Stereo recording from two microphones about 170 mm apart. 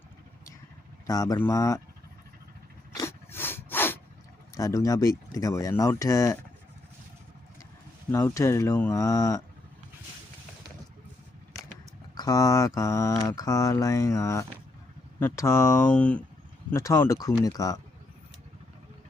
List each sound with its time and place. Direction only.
1.0 s mantra: 20° left (ahead or behind)
2.9 s a sound: 15° left (ahead or behind)
4.5 s mantra: 20° left (ahead or behind)
8.1 s speech: 15° left (ahead or behind)
12.1 s mantra: 20° left (ahead or behind)
15.2 s speech: 15° left (ahead or behind)
16.7 s mantra: 15° left (ahead or behind)